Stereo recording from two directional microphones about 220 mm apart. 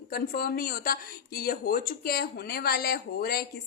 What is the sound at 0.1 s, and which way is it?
A woman's voice, 40° left (ahead or behind).